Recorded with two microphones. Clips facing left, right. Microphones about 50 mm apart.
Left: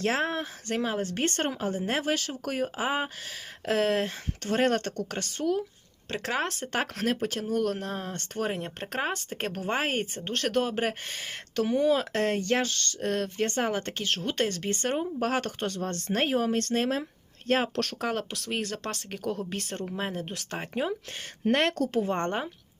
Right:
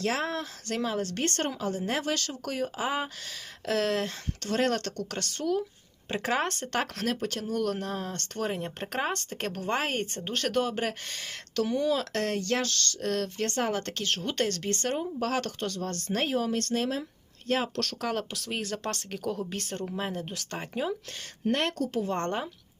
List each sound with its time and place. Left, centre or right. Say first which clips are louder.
0.0 s speech: left 2 dB; left
2.0 s speech: left 2 dB; centre
6.1 s speech: right 1 dB; centre
6.7 s speech: left 2 dB; centre
8.5 s speech: even; centre
10.2 s speech: left 1 dB; centre; by 18.1 s left
18.1 s speech: left 1 dB; centre
21.4 s speech: left 3 dB; left
22.0 s speech: left 1 dB; left